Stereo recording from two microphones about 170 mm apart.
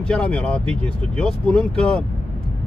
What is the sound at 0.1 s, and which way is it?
Speech, 5° left (ahead or behind).